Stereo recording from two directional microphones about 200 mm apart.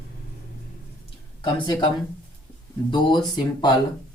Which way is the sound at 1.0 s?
25° left (ahead or behind).